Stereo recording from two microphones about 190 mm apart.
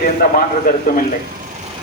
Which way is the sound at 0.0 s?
50° left (ahead or behind).